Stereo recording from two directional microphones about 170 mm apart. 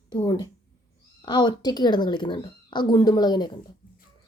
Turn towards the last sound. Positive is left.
turn(degrees=25)  # may be behind; listen again after turning